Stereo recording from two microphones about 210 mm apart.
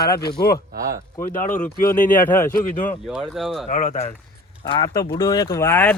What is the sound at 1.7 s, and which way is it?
Speech, 40° left (ahead or behind).